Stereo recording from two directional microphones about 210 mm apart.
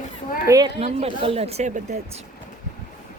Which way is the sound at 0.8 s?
30° right (ahead or behind).